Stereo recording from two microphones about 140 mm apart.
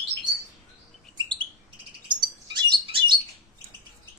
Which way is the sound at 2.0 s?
30° right (ahead or behind).